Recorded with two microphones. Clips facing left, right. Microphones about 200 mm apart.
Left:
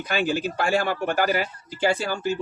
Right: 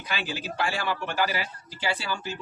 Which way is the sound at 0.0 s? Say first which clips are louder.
Left 9 dB; 45° left (ahead or behind).